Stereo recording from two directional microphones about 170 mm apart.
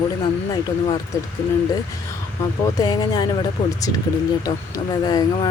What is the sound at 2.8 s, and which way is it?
Speech, 25° left (ahead or behind).